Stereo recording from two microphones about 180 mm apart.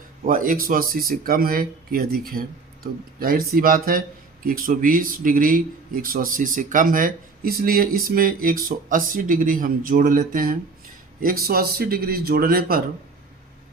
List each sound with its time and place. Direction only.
0.3 s a man's voice: 50° right (ahead or behind)